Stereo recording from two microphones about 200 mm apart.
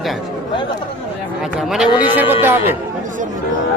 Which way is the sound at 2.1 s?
10° right (ahead or behind).